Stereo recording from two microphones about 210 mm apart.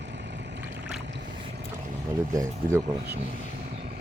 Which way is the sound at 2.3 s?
15° right (ahead or behind).